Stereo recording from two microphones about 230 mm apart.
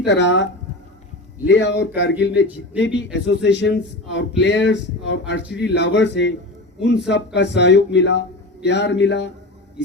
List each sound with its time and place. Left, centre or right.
0.0 s speech: left
1.5 s speech: left
7.3 s speech: left